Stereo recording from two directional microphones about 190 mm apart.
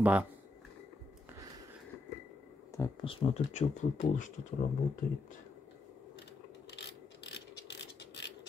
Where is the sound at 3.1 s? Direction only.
30° left (ahead or behind).